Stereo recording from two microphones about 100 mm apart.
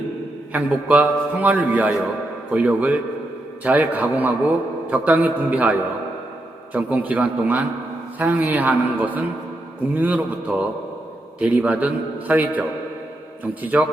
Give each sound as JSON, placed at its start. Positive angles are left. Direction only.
{"t": 0.5, "sound": "a man's voice", "side_deg": -15}
{"t": 6.7, "sound": "a man's voice", "side_deg": -15}
{"t": 10.5, "sound": "a man's voice", "side_deg": -5}